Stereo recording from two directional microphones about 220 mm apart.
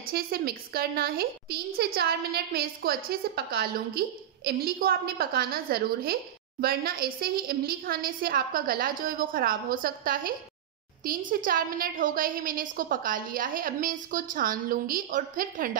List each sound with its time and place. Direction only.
0.0 s a woman's voice: 45° right (ahead or behind)